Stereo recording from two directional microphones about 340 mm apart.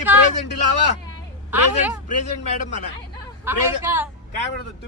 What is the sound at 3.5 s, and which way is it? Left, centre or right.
Speech, centre.